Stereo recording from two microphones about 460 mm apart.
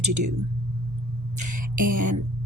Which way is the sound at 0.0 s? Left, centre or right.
Right.